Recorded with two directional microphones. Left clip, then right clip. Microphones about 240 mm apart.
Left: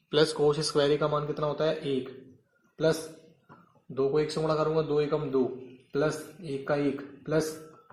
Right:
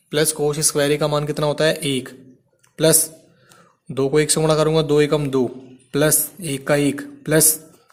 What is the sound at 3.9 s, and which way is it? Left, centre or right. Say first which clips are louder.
Speech: right 9 dB; right.